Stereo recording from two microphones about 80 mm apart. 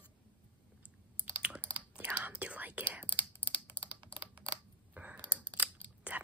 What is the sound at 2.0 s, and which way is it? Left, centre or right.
Whispering, right.